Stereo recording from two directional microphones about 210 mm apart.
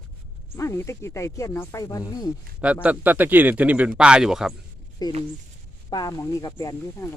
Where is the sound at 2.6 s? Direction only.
5° right (ahead or behind).